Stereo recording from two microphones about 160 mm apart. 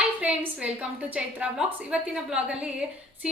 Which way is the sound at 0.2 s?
5° right (ahead or behind).